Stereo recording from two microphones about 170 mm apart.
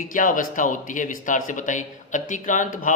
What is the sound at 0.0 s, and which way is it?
Speech, 50° left (ahead or behind).